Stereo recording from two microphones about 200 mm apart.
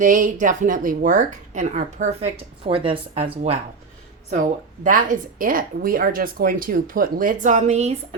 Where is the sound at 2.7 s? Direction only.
25° right (ahead or behind).